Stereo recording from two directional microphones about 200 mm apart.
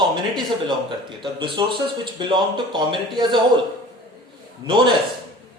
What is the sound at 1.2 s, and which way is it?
Speech, 25° right (ahead or behind).